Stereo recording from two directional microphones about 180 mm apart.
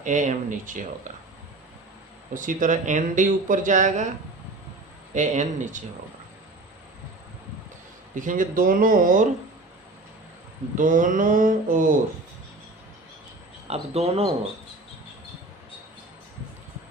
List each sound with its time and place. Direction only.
0.0 s speech: 45° right (ahead or behind)
2.3 s speech: 45° right (ahead or behind)
5.1 s speech: 45° right (ahead or behind)
8.1 s speech: 45° right (ahead or behind)
10.8 s speech: 45° right (ahead or behind)
13.7 s speech: 35° right (ahead or behind)